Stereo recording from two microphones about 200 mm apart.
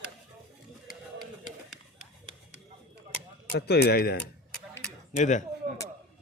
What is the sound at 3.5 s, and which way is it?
Speech, 55° left (ahead or behind).